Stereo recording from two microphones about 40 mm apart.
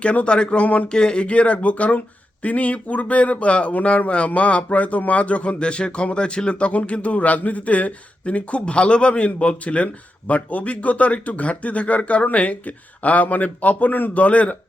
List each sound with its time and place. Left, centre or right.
0.0 s speech: left
0.6 s speech: left
0.9 s speech: left